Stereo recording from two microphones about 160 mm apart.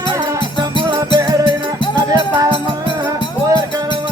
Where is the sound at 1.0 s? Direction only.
25° right (ahead or behind).